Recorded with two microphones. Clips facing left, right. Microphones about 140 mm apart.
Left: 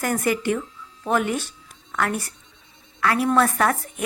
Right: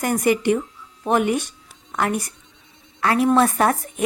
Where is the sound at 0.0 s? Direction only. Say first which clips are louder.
Right 4 dB; 20° right (ahead or behind).